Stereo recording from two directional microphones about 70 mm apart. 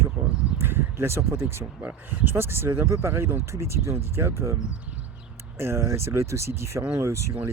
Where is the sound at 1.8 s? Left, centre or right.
Right.